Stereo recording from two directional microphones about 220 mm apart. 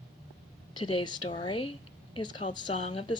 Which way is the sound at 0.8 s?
20° left (ahead or behind).